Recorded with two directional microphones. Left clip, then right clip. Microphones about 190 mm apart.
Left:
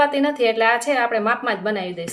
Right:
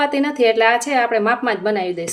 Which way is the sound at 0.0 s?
50° right (ahead or behind).